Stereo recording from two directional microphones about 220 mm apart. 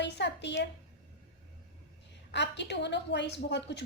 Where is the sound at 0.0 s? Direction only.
50° left (ahead or behind).